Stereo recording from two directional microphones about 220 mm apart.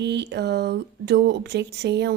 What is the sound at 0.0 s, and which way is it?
Speech, 50° right (ahead or behind).